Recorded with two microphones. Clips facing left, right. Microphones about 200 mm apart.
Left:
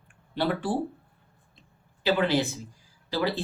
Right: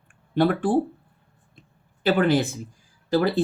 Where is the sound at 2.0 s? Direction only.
50° right (ahead or behind).